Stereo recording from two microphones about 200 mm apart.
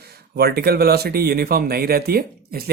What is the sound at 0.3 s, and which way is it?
Speech, 50° right (ahead or behind).